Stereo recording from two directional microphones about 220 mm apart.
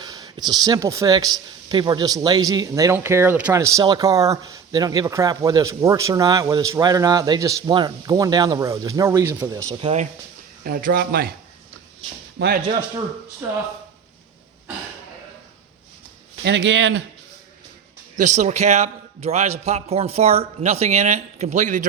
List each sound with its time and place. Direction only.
0.0 s a man's voice: 20° right (ahead or behind)
9.8 s a man's voice: 30° right (ahead or behind)
10.6 s speech: 40° right (ahead or behind)
12.4 s speech: 50° right (ahead or behind)
16.4 s speech: 50° right (ahead or behind)
18.2 s a man's voice: 35° right (ahead or behind)